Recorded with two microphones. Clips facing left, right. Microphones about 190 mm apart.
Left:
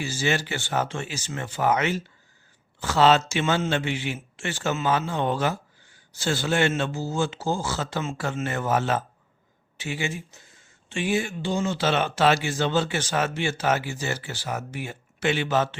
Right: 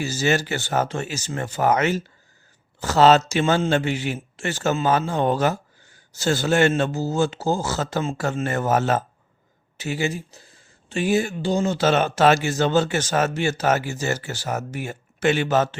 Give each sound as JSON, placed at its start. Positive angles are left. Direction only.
{"t": 0.0, "sound": "speech", "side_deg": -40}